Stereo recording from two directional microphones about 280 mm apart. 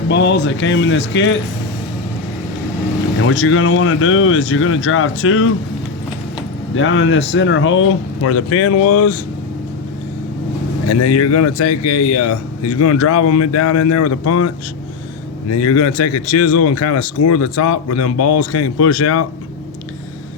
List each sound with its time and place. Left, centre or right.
0.1 s speech: left
3.2 s speech: left
6.7 s speech: left
10.8 s a man's voice: left
15.5 s a man's voice: left